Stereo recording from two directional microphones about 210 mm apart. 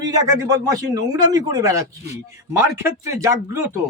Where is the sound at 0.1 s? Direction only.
15° right (ahead or behind).